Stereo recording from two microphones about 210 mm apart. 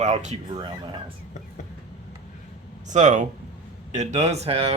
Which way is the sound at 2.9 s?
35° right (ahead or behind).